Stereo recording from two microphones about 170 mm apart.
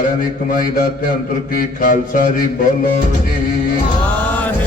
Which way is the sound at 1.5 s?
55° left (ahead or behind).